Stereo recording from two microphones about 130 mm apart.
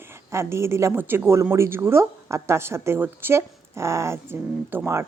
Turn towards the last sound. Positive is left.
turn(degrees=-20)  # may be behind; listen again after turning